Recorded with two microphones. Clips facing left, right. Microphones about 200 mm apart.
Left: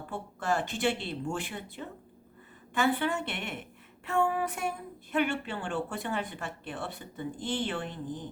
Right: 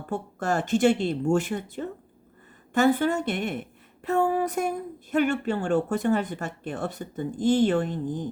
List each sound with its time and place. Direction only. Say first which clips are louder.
0.1 s a woman's voice: right 4 dB; 45° right (ahead or behind)